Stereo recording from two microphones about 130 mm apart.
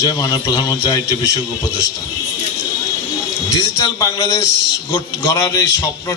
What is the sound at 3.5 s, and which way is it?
A man's voice, 25° left (ahead or behind).